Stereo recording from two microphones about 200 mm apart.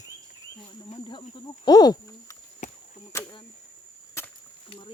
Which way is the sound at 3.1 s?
15° left (ahead or behind).